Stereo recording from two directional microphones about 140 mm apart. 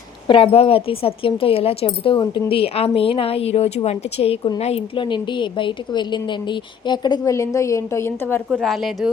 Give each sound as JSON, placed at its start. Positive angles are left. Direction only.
{"t": 0.3, "sound": "a woman's voice", "side_deg": 40}
{"t": 8.6, "sound": "speech", "side_deg": 0}